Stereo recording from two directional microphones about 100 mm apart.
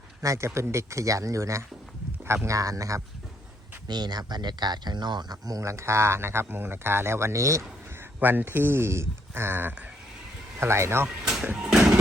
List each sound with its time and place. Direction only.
0.2 s speech: 30° right (ahead or behind)
3.8 s speech: 45° right (ahead or behind)
8.2 s speech: 20° right (ahead or behind)
11.2 s sliding door: 5° right (ahead or behind)
11.5 s a sound: 5° right (ahead or behind)